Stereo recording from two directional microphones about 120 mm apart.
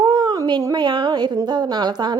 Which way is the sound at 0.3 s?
40° right (ahead or behind).